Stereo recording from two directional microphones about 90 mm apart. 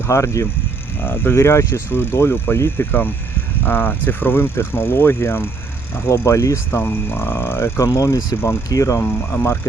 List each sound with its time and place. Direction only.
0.1 s speech: 35° left (ahead or behind)
1.0 s speech: 25° left (ahead or behind)
7.9 s speech: 40° left (ahead or behind)
9.3 s speech: 30° left (ahead or behind)